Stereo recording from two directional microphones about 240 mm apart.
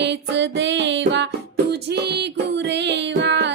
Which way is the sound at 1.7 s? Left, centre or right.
Right.